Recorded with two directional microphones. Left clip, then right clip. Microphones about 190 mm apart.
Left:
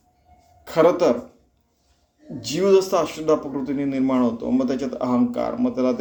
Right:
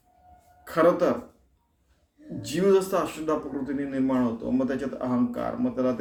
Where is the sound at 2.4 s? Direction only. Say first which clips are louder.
Left 5 dB; centre (ahead or behind).